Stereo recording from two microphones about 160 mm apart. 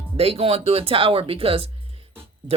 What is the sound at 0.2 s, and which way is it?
Speech, 40° right (ahead or behind).